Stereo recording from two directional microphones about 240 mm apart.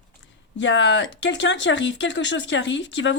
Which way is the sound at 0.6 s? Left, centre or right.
Left.